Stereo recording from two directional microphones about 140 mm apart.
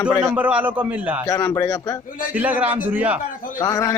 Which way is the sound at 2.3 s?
10° right (ahead or behind).